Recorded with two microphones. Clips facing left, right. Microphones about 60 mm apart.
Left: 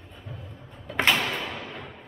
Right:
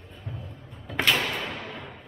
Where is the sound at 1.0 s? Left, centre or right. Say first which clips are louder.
Left 1 dB; left.